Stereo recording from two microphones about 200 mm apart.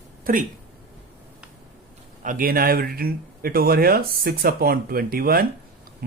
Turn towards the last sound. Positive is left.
turn(degrees=-50)  # may be behind; listen again after turning